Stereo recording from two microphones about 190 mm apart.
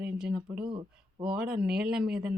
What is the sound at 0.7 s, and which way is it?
Speech, 25° right (ahead or behind).